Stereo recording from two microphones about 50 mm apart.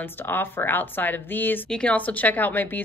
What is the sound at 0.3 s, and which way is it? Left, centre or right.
A woman's voice, left.